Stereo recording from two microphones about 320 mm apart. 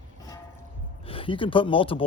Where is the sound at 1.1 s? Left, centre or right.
Centre.